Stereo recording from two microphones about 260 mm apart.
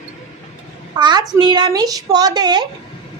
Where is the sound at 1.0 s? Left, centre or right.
Centre.